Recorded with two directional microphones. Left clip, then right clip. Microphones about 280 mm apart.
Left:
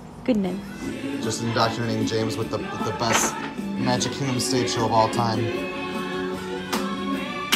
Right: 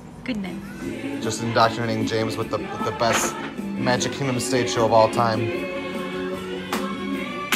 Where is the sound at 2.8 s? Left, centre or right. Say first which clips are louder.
Right 4 dB; centre.